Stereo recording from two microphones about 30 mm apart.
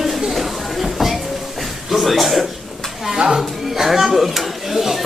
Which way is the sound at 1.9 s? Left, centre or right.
Centre.